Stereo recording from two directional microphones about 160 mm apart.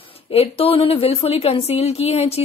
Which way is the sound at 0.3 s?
40° left (ahead or behind).